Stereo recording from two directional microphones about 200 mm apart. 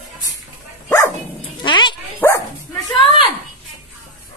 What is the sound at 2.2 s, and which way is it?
Dog, 10° left (ahead or behind).